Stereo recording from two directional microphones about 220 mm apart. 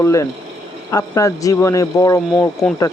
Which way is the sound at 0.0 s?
15° left (ahead or behind).